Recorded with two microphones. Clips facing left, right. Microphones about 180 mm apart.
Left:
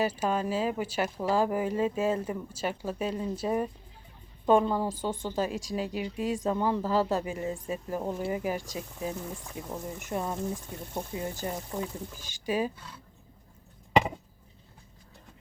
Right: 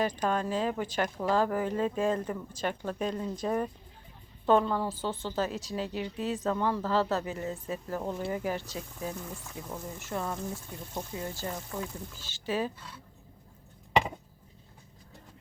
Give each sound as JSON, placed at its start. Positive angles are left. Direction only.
{"t": 0.0, "sound": "a woman's voice", "side_deg": 10}